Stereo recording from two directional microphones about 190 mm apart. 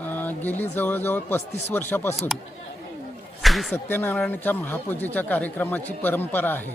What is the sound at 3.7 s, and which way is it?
Speech, 10° left (ahead or behind).